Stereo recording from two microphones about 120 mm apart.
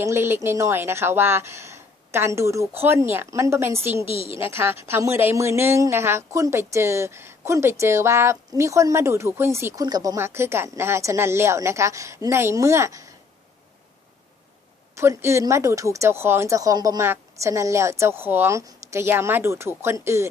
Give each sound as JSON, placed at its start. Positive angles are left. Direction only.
{"t": 0.0, "sound": "a woman's voice", "side_deg": -20}
{"t": 14.9, "sound": "a woman's voice", "side_deg": -20}